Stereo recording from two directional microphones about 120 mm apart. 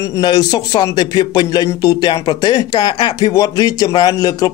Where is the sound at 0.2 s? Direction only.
35° left (ahead or behind).